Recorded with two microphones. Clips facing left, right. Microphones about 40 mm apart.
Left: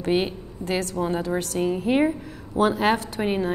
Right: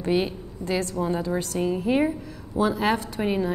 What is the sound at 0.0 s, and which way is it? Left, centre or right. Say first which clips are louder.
A woman's voice: left 1 dB; left.